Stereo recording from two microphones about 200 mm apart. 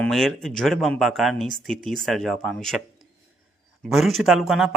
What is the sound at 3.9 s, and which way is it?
Speech, centre (ahead or behind).